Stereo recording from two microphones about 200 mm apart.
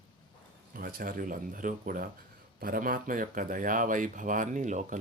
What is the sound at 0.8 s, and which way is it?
Speech, 45° right (ahead or behind).